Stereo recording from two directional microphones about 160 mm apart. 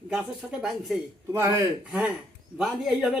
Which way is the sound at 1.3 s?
15° right (ahead or behind).